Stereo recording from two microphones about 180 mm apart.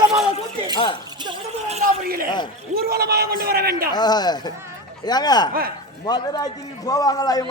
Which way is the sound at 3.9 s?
25° left (ahead or behind).